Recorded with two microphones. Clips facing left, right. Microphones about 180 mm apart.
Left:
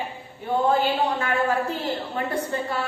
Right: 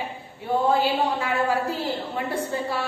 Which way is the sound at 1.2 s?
10° right (ahead or behind).